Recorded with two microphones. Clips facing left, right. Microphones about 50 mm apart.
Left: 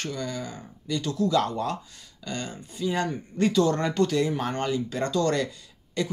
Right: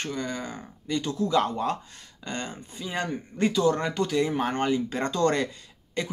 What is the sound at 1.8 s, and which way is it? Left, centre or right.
Speech, right.